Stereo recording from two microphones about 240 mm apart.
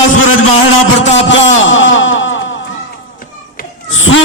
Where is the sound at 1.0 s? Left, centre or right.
Left.